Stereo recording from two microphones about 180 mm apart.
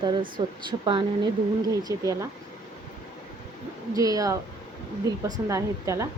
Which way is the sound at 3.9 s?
20° right (ahead or behind).